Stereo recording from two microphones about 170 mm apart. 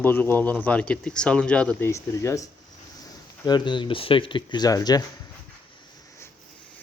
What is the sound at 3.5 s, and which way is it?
Speech, 25° left (ahead or behind).